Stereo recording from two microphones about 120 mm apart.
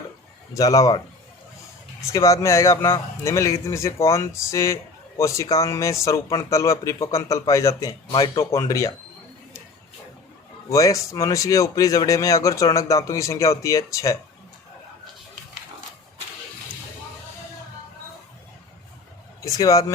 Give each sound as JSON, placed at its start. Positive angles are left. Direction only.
{"t": 0.5, "sound": "a man's voice", "side_deg": 30}
{"t": 2.0, "sound": "a man's voice", "side_deg": 25}
{"t": 10.7, "sound": "a man's voice", "side_deg": 25}
{"t": 19.4, "sound": "speech", "side_deg": 25}